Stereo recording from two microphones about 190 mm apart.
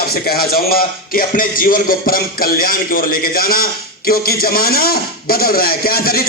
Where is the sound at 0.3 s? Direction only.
50° left (ahead or behind).